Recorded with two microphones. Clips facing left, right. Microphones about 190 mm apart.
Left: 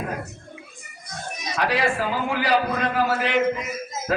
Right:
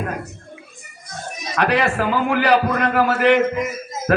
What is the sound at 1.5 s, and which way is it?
A man's voice, 65° right (ahead or behind).